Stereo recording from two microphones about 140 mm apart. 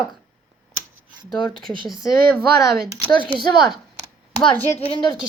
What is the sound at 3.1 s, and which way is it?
Speech, 35° left (ahead or behind).